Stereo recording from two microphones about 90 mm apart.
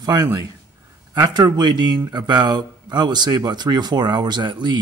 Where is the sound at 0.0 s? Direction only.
45° right (ahead or behind).